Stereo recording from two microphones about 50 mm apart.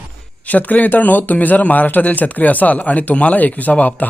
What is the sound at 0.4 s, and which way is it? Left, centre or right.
A man's voice, left.